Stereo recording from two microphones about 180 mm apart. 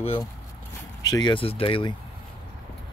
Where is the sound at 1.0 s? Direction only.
20° left (ahead or behind).